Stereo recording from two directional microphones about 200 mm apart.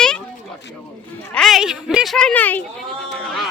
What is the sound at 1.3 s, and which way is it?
Speech, centre (ahead or behind).